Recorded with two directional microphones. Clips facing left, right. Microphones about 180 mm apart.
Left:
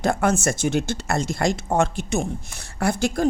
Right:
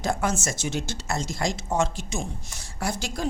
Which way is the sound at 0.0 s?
60° left (ahead or behind).